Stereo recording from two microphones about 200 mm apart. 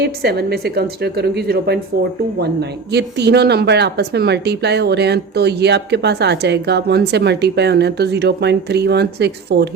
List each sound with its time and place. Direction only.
0.0 s a woman's voice: 55° right (ahead or behind)